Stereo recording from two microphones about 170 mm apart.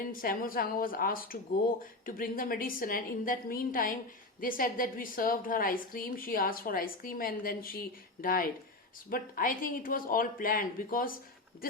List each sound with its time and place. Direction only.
0.0 s a woman's voice: 55° left (ahead or behind)